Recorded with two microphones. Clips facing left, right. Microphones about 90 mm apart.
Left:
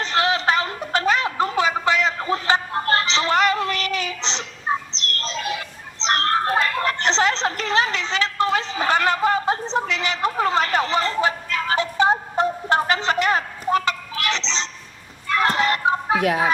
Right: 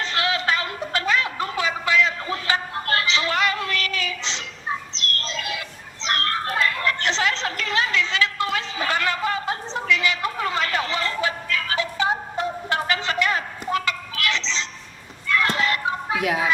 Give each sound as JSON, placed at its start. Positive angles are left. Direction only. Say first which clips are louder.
{"t": 0.0, "sound": "music", "louder": "left 4 dB", "side_deg": 30}
{"t": 6.1, "sound": "a sound", "louder": "left 5 dB", "side_deg": 30}
{"t": 15.3, "sound": "children playing", "louder": "left 2 dB", "side_deg": 30}